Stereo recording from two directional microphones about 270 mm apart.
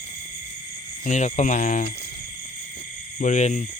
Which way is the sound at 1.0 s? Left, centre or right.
Left.